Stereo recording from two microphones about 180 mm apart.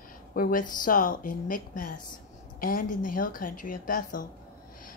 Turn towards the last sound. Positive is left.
turn(degrees=50)  # may be behind; listen again after turning